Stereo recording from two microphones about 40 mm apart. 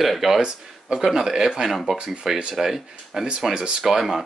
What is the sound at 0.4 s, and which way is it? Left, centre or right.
Speech, right.